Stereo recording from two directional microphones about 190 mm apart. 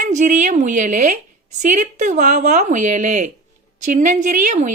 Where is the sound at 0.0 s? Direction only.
40° right (ahead or behind).